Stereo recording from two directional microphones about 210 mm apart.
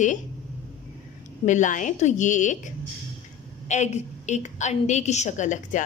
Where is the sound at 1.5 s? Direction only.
35° left (ahead or behind).